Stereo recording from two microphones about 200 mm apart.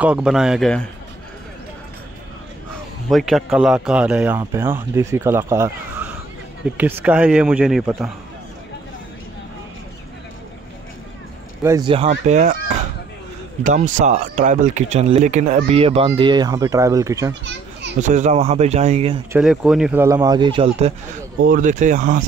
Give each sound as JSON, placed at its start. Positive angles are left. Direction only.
{"t": 0.0, "sound": "a man's voice", "side_deg": -5}
{"t": 3.1, "sound": "a man's voice", "side_deg": 0}
{"t": 11.6, "sound": "a man's voice", "side_deg": -15}
{"t": 11.9, "sound": "speech", "side_deg": -30}
{"t": 18.0, "sound": "speech", "side_deg": -35}
{"t": 19.3, "sound": "a man's voice", "side_deg": 0}